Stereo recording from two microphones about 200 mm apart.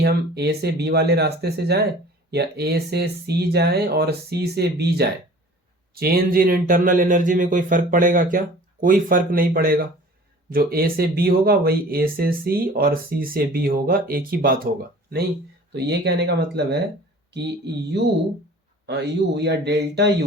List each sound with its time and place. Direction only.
0.0 s speech: 55° right (ahead or behind)